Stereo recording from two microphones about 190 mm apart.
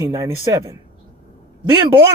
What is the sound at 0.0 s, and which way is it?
Speech, 15° right (ahead or behind).